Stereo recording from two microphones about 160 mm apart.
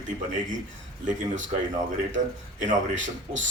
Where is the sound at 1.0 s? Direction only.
50° right (ahead or behind).